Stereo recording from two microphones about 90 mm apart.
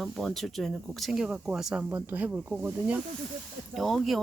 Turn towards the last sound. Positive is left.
turn(degrees=0)  # may be behind; listen again after turning